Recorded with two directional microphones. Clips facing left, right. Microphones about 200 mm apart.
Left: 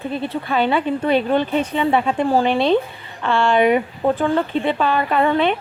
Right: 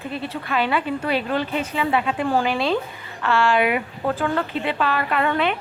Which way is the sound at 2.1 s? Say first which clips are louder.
Left 4 dB; 40° left (ahead or behind).